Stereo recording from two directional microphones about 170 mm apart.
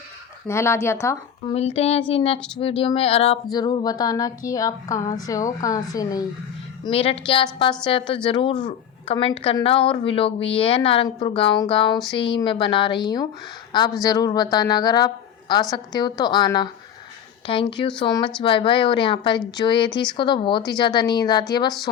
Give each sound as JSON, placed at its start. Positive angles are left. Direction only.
{"t": 0.4, "sound": "speech", "side_deg": 15}
{"t": 1.5, "sound": "a woman's voice", "side_deg": 40}
{"t": 6.8, "sound": "a woman's voice", "side_deg": 35}